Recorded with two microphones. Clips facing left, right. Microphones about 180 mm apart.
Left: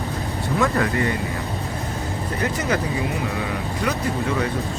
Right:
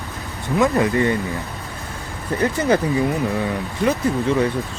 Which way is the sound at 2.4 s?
30° right (ahead or behind).